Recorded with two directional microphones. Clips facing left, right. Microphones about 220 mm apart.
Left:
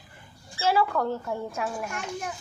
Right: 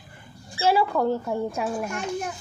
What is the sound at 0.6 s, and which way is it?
Speech, 15° right (ahead or behind).